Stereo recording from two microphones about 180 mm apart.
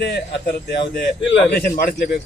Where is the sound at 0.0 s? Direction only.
65° left (ahead or behind).